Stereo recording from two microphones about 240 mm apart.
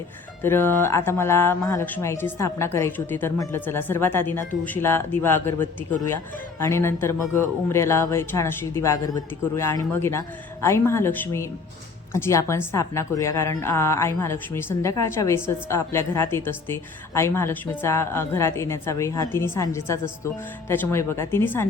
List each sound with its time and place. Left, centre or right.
0.4 s a woman's voice: centre